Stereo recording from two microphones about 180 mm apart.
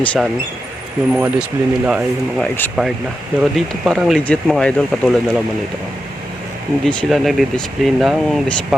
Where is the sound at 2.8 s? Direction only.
Centre (ahead or behind).